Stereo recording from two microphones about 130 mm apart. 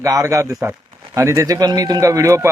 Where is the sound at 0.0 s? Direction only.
25° right (ahead or behind).